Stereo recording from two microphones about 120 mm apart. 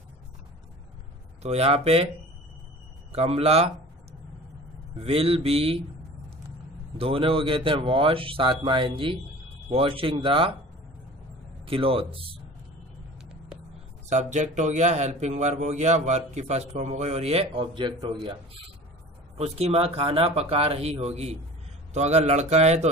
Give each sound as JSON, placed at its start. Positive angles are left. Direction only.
{"t": 1.4, "sound": "speech", "side_deg": -60}
{"t": 3.1, "sound": "speech", "side_deg": -55}
{"t": 4.9, "sound": "speech", "side_deg": -55}
{"t": 7.0, "sound": "speech", "side_deg": -50}
{"t": 11.6, "sound": "speech", "side_deg": -50}
{"t": 14.0, "sound": "speech", "side_deg": -80}
{"t": 19.3, "sound": "speech", "side_deg": -60}